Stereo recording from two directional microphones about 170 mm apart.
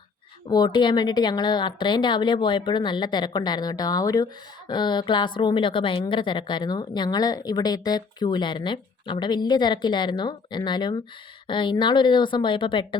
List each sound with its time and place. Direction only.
0.4 s a woman's voice: 25° left (ahead or behind)